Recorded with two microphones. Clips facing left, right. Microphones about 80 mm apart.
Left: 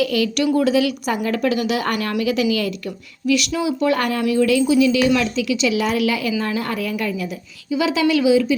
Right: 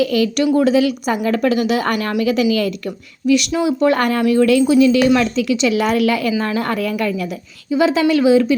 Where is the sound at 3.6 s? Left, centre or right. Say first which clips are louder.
Right 4 dB; right.